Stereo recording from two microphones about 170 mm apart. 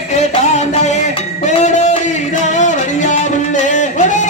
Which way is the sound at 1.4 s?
45° left (ahead or behind).